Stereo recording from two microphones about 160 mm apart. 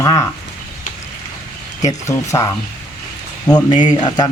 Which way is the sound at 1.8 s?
20° left (ahead or behind).